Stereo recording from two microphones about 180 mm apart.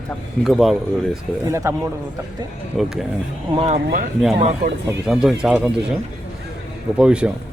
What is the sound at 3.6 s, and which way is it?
Speech, 35° right (ahead or behind).